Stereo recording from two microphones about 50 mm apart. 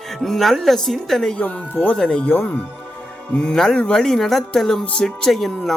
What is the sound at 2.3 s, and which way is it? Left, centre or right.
Speech, left.